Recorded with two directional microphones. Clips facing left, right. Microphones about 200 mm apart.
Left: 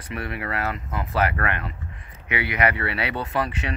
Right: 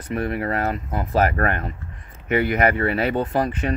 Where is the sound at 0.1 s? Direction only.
35° right (ahead or behind).